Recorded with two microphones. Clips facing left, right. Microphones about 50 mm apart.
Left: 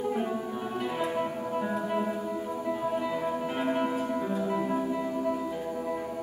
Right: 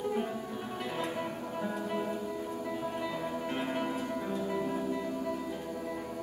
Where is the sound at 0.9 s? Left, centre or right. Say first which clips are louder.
Left 5 dB; centre.